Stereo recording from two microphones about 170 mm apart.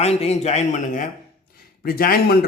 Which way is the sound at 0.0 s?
40° left (ahead or behind).